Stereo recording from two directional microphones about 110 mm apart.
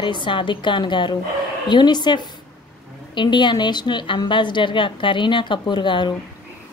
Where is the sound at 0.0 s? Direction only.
50° left (ahead or behind).